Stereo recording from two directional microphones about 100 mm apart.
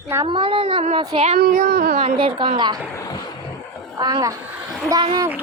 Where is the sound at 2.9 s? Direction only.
35° left (ahead or behind).